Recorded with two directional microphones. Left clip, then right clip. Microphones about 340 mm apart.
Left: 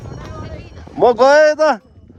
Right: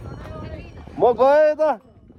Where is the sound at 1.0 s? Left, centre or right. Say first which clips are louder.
Left 5 dB; left.